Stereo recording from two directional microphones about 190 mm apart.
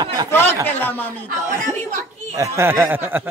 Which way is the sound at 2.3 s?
15° right (ahead or behind).